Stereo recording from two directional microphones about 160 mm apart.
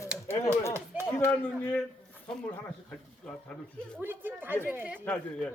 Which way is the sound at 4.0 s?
15° right (ahead or behind).